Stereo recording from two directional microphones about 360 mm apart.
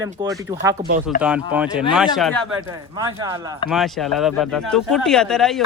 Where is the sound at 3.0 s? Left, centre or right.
Centre.